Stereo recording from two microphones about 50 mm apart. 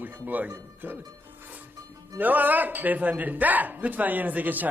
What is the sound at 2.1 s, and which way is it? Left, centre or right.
A man's voice, right.